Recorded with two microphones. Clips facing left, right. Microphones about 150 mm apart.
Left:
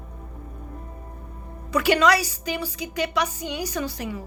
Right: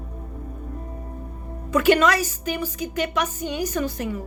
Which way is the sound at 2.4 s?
15° left (ahead or behind).